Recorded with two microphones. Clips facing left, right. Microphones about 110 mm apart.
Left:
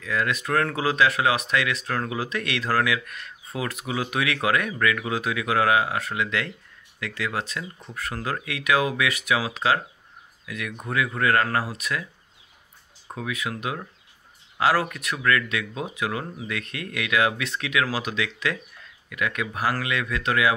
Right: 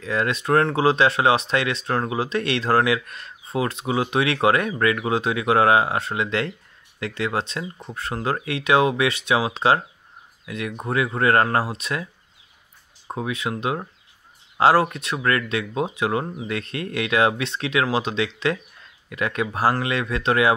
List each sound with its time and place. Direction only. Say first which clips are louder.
0.0 s speech: right 3 dB; 30° right (ahead or behind)
13.1 s speech: right 4 dB; 30° right (ahead or behind)